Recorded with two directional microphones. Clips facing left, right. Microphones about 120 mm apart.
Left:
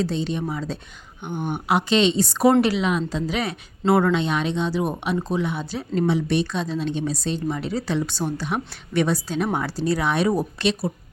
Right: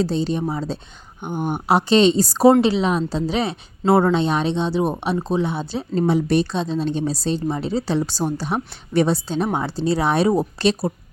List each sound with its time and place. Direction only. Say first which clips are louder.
0.0 s a woman's voice: right 4 dB; 35° right (ahead or behind)
1.2 s a woman's voice: right 3 dB; 40° right (ahead or behind)